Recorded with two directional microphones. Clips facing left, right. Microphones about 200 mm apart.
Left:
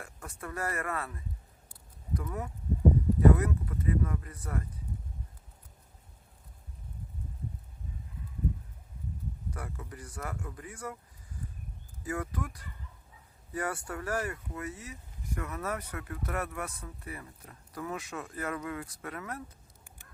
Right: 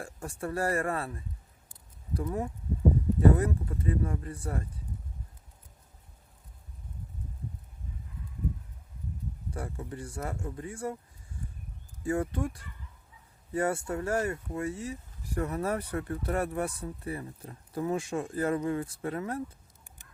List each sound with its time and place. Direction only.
0.0 s speech: 30° right (ahead or behind)
9.5 s speech: 30° right (ahead or behind)
11.3 s a sound: 25° right (ahead or behind)
12.0 s speech: 30° right (ahead or behind)